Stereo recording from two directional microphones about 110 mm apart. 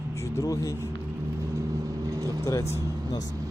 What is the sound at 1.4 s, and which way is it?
Vehicle, 30° right (ahead or behind).